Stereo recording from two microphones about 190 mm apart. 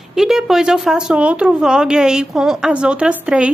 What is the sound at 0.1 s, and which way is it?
Speech, centre (ahead or behind).